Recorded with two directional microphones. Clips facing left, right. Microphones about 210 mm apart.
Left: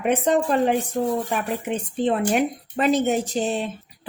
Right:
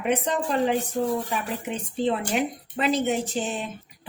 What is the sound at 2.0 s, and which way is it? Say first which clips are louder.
A woman's voice: left 4 dB; 50° left (ahead or behind).